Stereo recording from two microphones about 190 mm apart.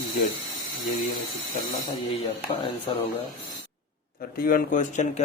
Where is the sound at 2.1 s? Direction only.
30° left (ahead or behind).